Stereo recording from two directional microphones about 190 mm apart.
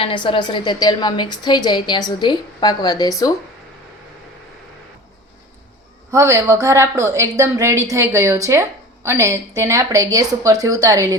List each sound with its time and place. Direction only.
0.0 s a woman's voice: 25° left (ahead or behind)
6.1 s a woman's voice: 15° right (ahead or behind)